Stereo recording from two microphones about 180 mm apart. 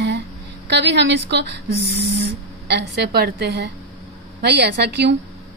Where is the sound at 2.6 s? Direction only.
65° right (ahead or behind).